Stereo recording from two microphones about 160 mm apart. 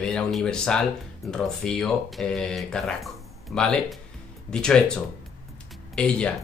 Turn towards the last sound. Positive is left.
turn(degrees=5)  # may be behind; listen again after turning